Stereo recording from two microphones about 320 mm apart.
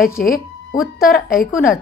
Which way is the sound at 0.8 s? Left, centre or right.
Centre.